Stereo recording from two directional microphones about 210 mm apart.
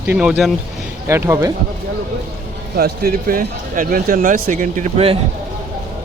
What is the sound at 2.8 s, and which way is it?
Speech, 45° right (ahead or behind).